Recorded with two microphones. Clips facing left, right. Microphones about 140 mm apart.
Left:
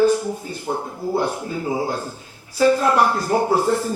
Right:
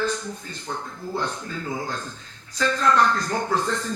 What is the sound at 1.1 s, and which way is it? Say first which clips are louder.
Speech: left 6 dB; 10° left (ahead or behind).